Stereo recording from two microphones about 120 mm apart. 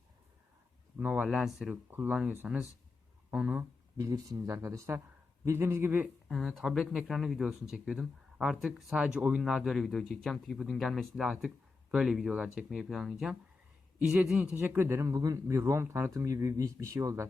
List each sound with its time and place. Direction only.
0.9 s speech: 10° right (ahead or behind)
1.7 s speech: 15° right (ahead or behind)
4.0 s speech: 30° right (ahead or behind)
6.2 s speech: centre (ahead or behind); by 17.2 s 25° right (ahead or behind)